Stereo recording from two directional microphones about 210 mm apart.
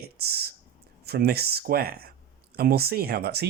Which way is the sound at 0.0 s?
50° right (ahead or behind).